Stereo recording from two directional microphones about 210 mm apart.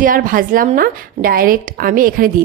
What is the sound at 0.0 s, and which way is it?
A woman's voice, 40° right (ahead or behind).